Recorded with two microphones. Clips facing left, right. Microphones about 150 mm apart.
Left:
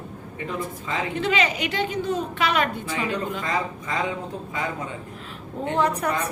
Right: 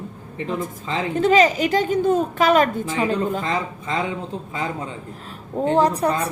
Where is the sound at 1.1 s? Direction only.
40° right (ahead or behind).